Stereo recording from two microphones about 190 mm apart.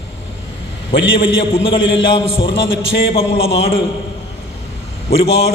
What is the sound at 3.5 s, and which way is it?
Speech, 30° left (ahead or behind).